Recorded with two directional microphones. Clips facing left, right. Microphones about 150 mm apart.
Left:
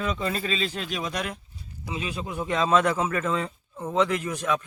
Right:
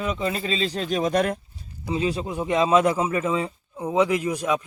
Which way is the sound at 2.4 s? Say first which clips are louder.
Right 3 dB; 15° right (ahead or behind).